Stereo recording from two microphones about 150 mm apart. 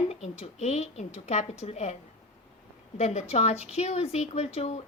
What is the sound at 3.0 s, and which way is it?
A woman's voice, 45° left (ahead or behind).